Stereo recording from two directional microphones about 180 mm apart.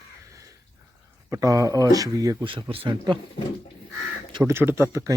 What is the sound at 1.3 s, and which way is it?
Speech, 20° right (ahead or behind).